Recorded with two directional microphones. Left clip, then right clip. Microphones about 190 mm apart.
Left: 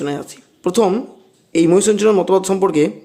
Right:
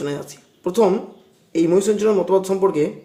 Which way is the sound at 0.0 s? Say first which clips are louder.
Left 3 dB; 20° left (ahead or behind).